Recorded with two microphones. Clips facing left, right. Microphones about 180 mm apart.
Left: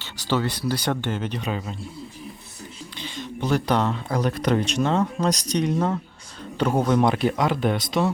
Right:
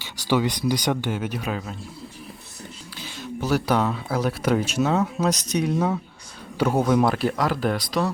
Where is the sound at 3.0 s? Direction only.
5° right (ahead or behind).